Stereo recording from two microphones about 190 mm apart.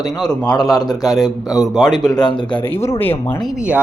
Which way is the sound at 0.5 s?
20° left (ahead or behind).